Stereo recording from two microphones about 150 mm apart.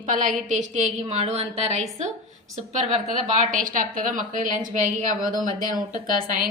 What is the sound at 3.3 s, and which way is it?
A woman's voice, 60° right (ahead or behind).